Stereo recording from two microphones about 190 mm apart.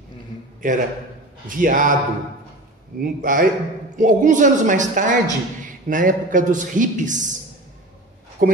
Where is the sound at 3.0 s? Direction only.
50° right (ahead or behind).